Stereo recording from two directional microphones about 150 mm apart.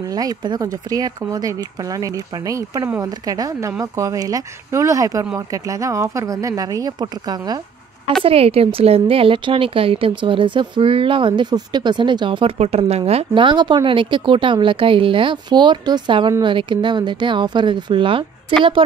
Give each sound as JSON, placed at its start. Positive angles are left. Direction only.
{"t": 0.1, "sound": "speech", "side_deg": -25}
{"t": 8.2, "sound": "speech", "side_deg": -40}